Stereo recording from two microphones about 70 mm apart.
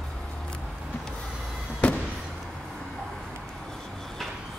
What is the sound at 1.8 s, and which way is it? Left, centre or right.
Fireworks, centre.